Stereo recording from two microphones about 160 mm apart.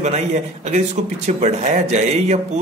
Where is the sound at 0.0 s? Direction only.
45° right (ahead or behind).